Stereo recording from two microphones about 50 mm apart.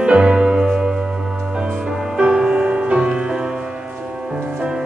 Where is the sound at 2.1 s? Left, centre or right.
Centre.